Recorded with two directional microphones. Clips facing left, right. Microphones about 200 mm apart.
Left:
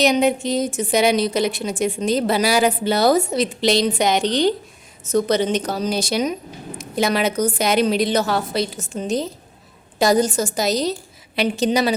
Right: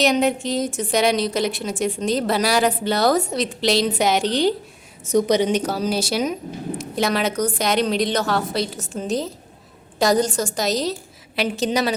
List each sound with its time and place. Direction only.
0.0 s a woman's voice: centre (ahead or behind)